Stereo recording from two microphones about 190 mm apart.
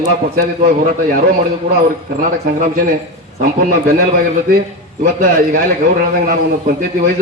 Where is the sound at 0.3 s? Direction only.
45° right (ahead or behind).